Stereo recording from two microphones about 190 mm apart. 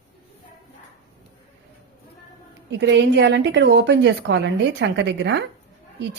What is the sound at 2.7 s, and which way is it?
A woman's voice, 65° right (ahead or behind).